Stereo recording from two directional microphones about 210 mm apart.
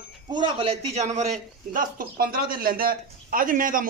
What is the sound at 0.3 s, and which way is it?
A man's voice, 20° right (ahead or behind).